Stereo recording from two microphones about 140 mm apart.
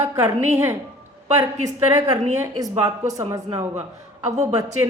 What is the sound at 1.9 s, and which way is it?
A woman's voice, 20° right (ahead or behind).